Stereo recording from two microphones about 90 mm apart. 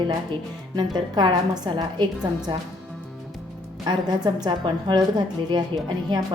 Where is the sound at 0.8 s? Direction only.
55° right (ahead or behind).